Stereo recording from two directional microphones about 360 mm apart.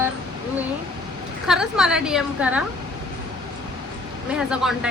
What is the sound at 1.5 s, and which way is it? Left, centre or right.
Speech, centre.